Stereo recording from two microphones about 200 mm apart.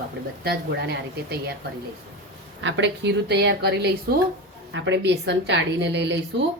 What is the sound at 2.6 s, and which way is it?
Speech, 65° right (ahead or behind).